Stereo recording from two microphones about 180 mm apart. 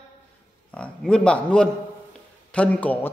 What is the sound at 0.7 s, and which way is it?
A man's voice, 5° left (ahead or behind).